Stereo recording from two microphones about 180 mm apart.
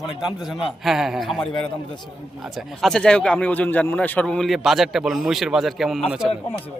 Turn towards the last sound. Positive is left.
turn(degrees=-5)  # may be behind; listen again after turning